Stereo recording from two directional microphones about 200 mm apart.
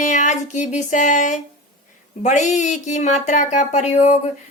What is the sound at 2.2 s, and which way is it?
Speech, 35° left (ahead or behind).